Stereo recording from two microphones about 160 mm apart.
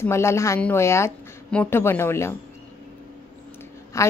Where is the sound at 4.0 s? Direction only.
20° left (ahead or behind).